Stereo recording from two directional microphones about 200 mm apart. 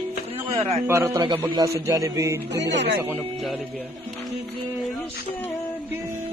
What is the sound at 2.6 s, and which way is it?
Speech, 60° right (ahead or behind).